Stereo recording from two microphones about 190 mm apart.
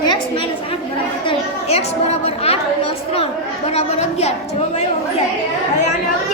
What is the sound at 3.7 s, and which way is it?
A woman's voice, 35° left (ahead or behind).